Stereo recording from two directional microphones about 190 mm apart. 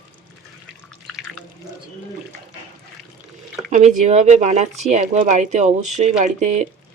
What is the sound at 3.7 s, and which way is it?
Speech, 40° right (ahead or behind).